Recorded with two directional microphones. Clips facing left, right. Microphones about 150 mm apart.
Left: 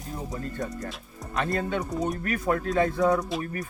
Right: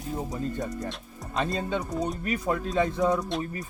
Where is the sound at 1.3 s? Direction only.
20° right (ahead or behind).